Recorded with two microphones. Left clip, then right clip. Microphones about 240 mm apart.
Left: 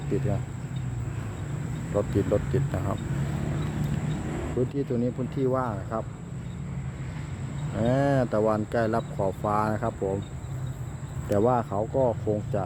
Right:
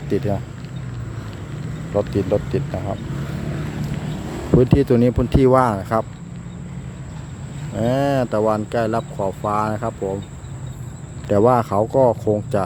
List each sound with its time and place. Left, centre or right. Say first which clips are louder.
2.0 s speech: right 6 dB; centre
4.1 s a sound: right 4 dB; right
4.7 s speech: right 13 dB; right
7.8 s speech: right 6 dB; centre
11.3 s speech: right 9 dB; centre